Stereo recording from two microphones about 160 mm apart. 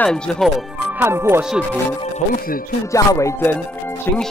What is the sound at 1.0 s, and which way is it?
Speech, 15° right (ahead or behind).